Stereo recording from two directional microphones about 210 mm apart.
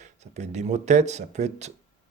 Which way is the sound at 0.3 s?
35° right (ahead or behind).